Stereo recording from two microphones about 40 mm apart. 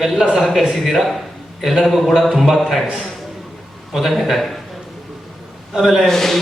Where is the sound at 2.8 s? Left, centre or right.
Right.